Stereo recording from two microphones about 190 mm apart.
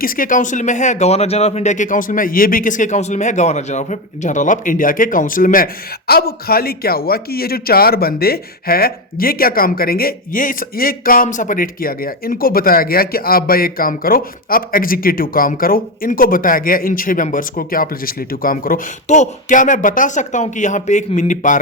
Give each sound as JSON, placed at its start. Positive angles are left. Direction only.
{"t": 0.0, "sound": "a man's voice", "side_deg": 45}